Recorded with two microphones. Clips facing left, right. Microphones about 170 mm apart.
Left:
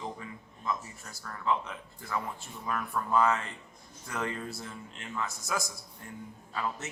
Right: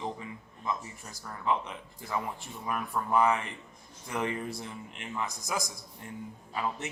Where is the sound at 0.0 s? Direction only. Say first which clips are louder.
Right 2 dB; 20° right (ahead or behind).